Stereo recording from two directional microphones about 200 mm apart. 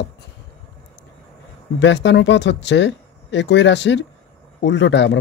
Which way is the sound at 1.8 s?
60° left (ahead or behind).